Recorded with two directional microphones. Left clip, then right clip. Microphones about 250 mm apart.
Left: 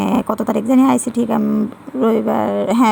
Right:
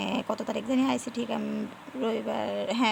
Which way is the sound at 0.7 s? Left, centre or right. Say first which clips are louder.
Left 14 dB; left.